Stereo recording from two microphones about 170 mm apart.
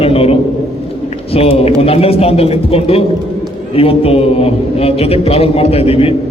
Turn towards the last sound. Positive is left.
turn(degrees=35)  # may be behind; listen again after turning